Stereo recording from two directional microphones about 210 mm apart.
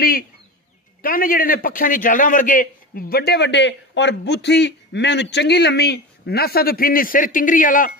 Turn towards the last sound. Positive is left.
turn(degrees=40)  # may be behind; listen again after turning